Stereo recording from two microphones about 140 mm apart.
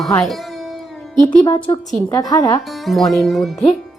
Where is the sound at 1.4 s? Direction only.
25° left (ahead or behind).